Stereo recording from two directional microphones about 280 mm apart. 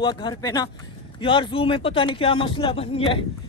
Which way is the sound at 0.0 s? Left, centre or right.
Centre.